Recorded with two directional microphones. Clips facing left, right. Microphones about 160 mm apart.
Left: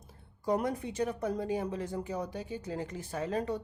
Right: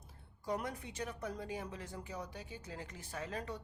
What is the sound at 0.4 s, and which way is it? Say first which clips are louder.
Speech: left 9 dB; 35° left (ahead or behind).